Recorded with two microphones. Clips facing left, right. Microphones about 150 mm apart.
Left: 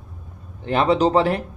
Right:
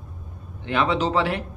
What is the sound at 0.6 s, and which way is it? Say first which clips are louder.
Speech: left 5 dB; 40° left (ahead or behind).